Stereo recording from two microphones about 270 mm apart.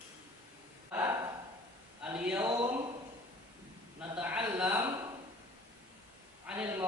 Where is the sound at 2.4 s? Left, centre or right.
Centre.